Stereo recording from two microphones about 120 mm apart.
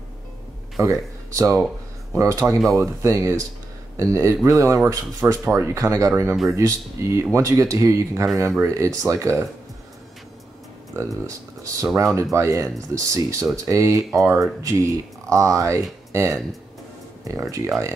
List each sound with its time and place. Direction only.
1.3 s speech: 25° right (ahead or behind)
11.2 s speech: 25° right (ahead or behind)